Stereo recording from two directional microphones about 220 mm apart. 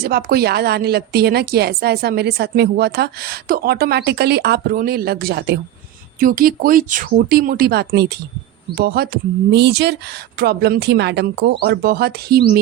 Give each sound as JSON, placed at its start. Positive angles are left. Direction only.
{"t": 0.0, "sound": "a woman's voice", "side_deg": -45}